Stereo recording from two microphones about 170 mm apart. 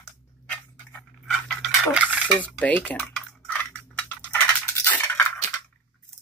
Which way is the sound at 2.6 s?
10° left (ahead or behind).